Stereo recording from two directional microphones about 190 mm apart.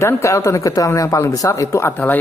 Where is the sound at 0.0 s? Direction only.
15° left (ahead or behind).